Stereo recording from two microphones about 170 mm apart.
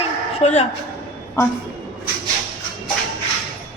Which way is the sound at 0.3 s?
40° left (ahead or behind).